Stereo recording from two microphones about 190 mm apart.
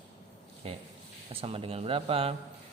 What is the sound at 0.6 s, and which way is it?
A man's voice, 30° right (ahead or behind).